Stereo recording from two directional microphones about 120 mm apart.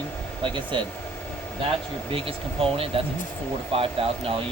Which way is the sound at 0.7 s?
45° right (ahead or behind).